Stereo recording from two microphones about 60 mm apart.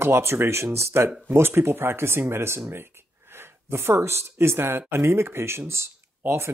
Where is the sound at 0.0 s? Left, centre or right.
Right.